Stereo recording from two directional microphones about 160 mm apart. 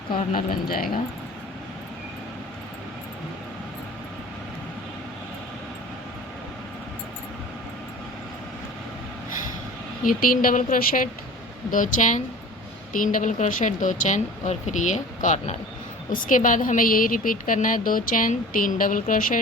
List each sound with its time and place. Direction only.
0.3 s speech: 65° left (ahead or behind)
10.0 s speech: 60° left (ahead or behind)